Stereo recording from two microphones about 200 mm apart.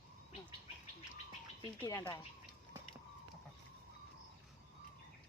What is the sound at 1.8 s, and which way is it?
Speech, 15° left (ahead or behind).